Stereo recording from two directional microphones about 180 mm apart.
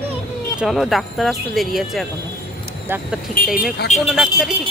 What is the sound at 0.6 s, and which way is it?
Speech, centre (ahead or behind).